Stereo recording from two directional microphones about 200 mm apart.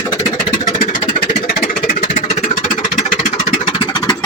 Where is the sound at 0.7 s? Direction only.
40° left (ahead or behind).